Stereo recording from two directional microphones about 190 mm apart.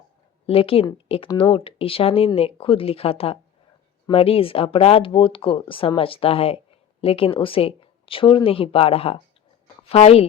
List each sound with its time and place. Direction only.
0.4 s speech: 30° left (ahead or behind)